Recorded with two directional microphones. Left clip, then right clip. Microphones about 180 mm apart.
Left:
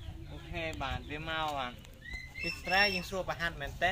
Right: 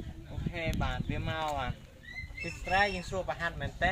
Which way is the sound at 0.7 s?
15° right (ahead or behind).